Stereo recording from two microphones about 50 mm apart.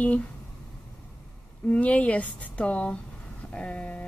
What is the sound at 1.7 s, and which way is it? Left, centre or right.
Speech, left.